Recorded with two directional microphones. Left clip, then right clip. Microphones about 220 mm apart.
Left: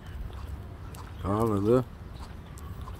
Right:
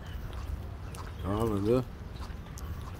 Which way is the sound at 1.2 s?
40° left (ahead or behind).